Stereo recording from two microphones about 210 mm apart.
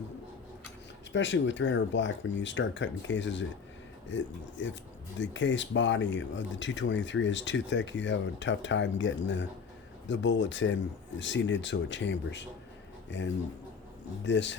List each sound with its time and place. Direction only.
1.1 s speech: 60° left (ahead or behind)